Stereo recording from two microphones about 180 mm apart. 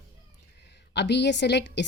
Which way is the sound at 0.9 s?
70° left (ahead or behind).